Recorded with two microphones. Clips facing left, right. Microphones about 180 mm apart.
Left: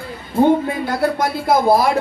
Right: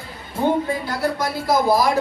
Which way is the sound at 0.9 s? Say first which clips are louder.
Left 4 dB; 55° left (ahead or behind).